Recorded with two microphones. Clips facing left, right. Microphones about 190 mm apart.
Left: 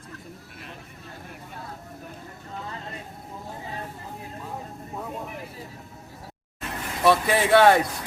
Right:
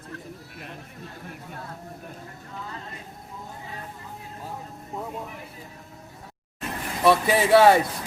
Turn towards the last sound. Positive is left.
turn(degrees=0)  # may be behind; listen again after turning